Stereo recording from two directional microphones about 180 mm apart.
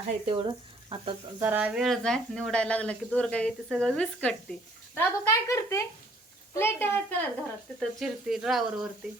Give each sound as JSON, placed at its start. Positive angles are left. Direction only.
{"t": 0.3, "sound": "speech", "side_deg": -30}
{"t": 1.4, "sound": "speech", "side_deg": -10}
{"t": 4.9, "sound": "speech", "side_deg": 15}
{"t": 7.8, "sound": "speech", "side_deg": 0}